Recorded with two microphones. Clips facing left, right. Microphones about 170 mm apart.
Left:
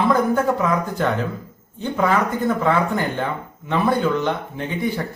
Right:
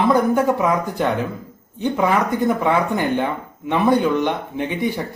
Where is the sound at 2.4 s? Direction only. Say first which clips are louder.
Even; 15° right (ahead or behind).